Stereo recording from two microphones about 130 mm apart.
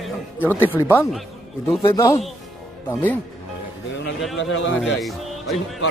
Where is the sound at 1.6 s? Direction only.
25° left (ahead or behind).